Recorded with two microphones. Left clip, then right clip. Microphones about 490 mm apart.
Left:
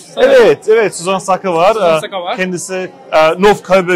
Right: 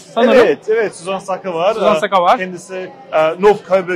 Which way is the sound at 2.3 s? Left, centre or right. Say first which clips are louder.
Left 4 dB; left.